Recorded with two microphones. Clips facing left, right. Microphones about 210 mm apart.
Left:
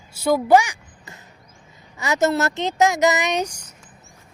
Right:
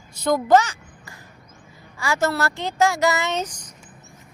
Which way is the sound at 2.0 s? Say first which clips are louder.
Left 3 dB; 20° left (ahead or behind).